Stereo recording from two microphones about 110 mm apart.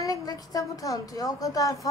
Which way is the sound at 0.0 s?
35° left (ahead or behind).